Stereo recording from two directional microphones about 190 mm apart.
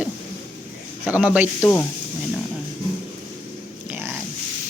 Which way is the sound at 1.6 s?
10° left (ahead or behind).